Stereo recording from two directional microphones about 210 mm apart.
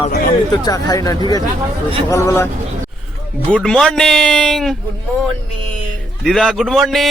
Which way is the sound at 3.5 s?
Centre (ahead or behind).